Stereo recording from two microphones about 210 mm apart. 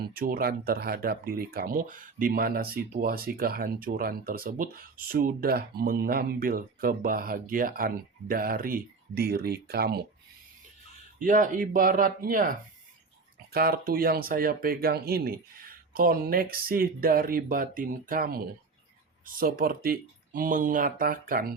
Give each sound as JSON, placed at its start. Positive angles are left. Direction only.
{"t": 0.1, "sound": "speech", "side_deg": -45}
{"t": 11.2, "sound": "speech", "side_deg": -40}